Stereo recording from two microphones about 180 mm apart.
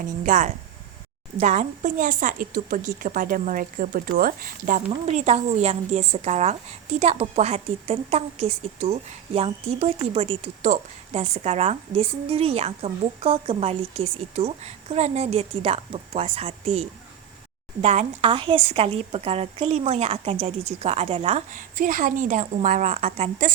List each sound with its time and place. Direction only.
0.0 s a woman's voice: 45° right (ahead or behind)
17.8 s a woman's voice: 35° right (ahead or behind)